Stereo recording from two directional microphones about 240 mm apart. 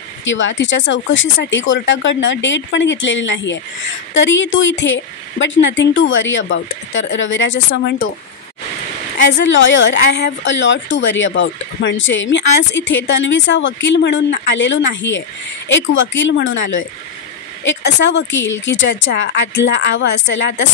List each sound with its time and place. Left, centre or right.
0.2 s speech: left
9.4 s speech: left